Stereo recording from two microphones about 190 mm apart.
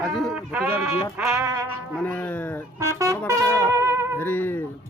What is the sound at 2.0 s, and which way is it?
Speech, 10° left (ahead or behind).